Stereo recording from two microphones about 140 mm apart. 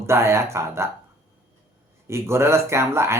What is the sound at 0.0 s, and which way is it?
Speech, 20° right (ahead or behind).